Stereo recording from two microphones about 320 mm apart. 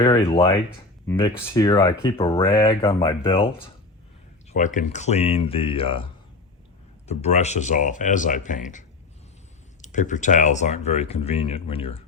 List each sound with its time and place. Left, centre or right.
0.0 s speech: centre
4.5 s speech: left
7.1 s speech: left
9.8 s speech: left